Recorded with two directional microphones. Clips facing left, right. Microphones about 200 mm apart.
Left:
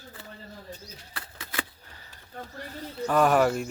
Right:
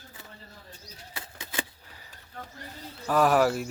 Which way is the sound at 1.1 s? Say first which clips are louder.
Even; 20° right (ahead or behind).